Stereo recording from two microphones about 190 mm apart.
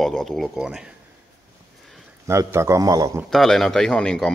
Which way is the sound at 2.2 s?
15° right (ahead or behind).